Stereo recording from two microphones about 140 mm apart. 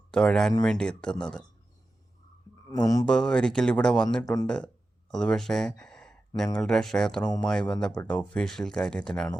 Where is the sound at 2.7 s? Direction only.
25° left (ahead or behind).